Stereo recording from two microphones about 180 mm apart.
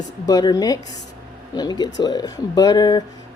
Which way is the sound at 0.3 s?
20° left (ahead or behind).